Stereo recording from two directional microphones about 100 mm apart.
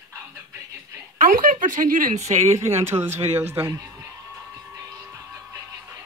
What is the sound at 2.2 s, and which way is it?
Speech, 30° right (ahead or behind).